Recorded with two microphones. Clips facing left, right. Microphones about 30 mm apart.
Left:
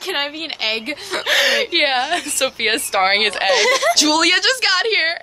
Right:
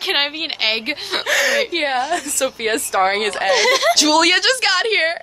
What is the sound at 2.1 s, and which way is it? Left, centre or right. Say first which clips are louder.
A woman's voice: even; left.